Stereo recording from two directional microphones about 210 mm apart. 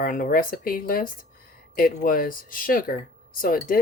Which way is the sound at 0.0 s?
40° left (ahead or behind).